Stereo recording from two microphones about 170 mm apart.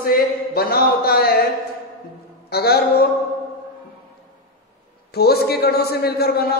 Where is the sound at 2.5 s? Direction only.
65° left (ahead or behind).